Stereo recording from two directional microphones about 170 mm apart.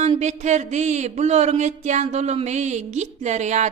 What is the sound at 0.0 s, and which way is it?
Speech, 40° right (ahead or behind).